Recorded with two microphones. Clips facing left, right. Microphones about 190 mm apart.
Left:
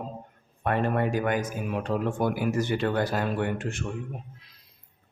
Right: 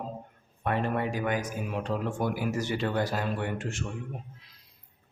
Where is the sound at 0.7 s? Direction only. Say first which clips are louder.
Left 3 dB; 50° left (ahead or behind).